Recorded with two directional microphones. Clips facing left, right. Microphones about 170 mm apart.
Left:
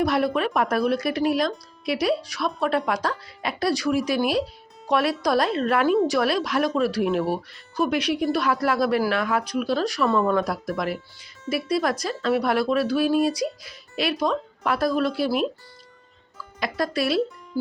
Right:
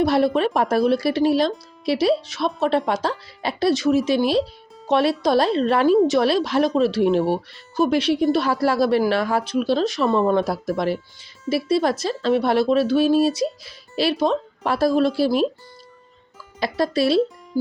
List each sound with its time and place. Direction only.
0.0 s a woman's voice: 30° right (ahead or behind)
16.6 s a woman's voice: 30° right (ahead or behind)